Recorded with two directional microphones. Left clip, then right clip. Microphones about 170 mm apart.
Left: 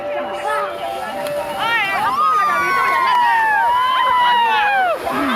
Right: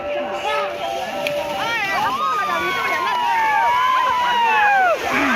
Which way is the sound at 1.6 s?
60° right (ahead or behind).